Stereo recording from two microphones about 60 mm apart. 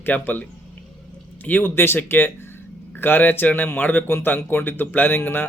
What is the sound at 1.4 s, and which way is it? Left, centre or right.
Speech, left.